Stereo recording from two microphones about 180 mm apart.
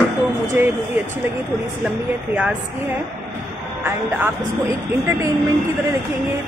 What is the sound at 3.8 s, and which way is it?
Speech, 15° right (ahead or behind).